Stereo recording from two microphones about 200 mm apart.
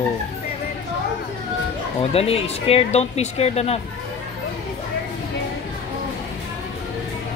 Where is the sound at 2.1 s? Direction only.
30° left (ahead or behind).